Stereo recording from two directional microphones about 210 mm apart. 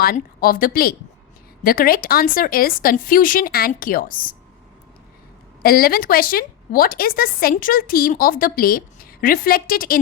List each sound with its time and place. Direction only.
0.0 s a woman's voice: 45° left (ahead or behind)
5.6 s a woman's voice: 45° left (ahead or behind)